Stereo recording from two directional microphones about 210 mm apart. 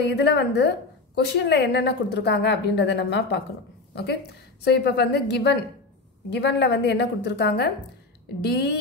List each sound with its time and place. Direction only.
0.0 s a woman's voice: 55° left (ahead or behind)